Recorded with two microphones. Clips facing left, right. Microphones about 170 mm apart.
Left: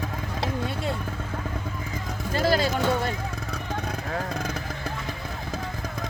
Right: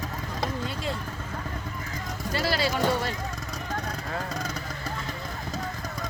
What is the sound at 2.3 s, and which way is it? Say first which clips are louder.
Speech: left 4 dB; 50° left (ahead or behind).